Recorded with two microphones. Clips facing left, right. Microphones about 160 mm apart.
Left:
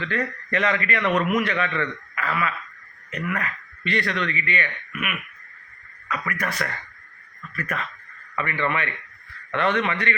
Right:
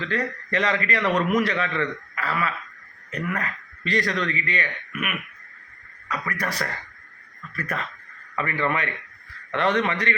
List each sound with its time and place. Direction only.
0.0 s speech: 35° right (ahead or behind)